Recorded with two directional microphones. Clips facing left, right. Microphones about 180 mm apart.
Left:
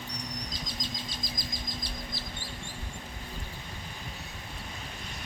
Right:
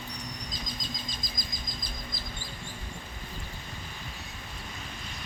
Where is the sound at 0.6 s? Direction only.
75° left (ahead or behind).